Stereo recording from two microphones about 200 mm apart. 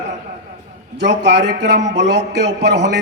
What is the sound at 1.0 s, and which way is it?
A man's voice, 60° right (ahead or behind).